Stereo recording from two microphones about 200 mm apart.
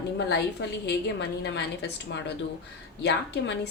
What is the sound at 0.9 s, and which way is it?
A woman's voice, 60° left (ahead or behind).